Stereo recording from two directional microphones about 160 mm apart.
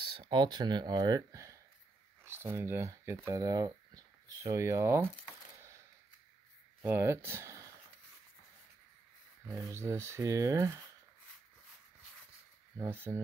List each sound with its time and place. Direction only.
0.0 s speech: 30° right (ahead or behind)
6.8 s speech: 15° right (ahead or behind)
9.5 s speech: 20° right (ahead or behind)
12.7 s speech: 15° right (ahead or behind)